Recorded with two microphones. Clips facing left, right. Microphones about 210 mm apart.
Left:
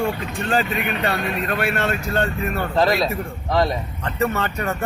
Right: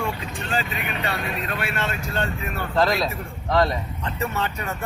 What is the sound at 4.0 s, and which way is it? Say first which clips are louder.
Speech: left 6 dB; 55° left (ahead or behind).